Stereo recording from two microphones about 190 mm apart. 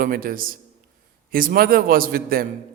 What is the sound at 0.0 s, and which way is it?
A man's voice, 50° right (ahead or behind).